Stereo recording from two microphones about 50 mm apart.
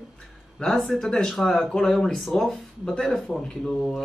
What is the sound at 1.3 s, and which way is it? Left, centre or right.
Speech, centre.